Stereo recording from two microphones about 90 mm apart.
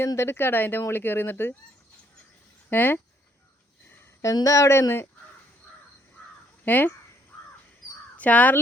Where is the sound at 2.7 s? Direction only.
20° left (ahead or behind).